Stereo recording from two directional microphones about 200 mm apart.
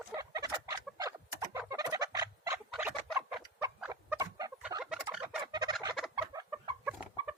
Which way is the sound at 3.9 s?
15° right (ahead or behind).